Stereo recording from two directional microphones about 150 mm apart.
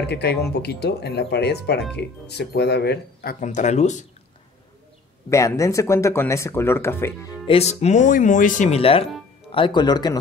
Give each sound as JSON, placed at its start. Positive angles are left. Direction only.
{"t": 0.0, "sound": "speech", "side_deg": 90}
{"t": 3.4, "sound": "speech", "side_deg": 50}
{"t": 5.3, "sound": "speech", "side_deg": 20}
{"t": 7.4, "sound": "speech", "side_deg": 45}
{"t": 8.7, "sound": "speech", "side_deg": 40}